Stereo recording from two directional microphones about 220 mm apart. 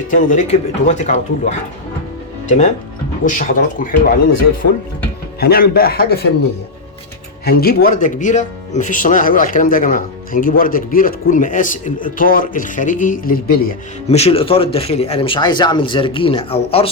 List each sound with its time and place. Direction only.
0.1 s speech: 35° left (ahead or behind)
5.4 s a man's voice: 45° left (ahead or behind)
7.4 s speech: 45° left (ahead or behind)
14.1 s speech: 25° left (ahead or behind)